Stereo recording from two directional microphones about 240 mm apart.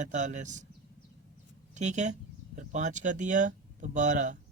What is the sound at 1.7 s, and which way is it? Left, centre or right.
Speech, right.